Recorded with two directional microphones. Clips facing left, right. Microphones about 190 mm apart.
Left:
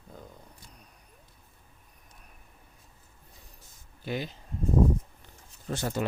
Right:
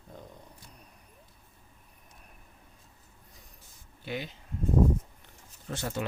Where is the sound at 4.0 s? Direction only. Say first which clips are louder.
Left 3 dB; 40° left (ahead or behind).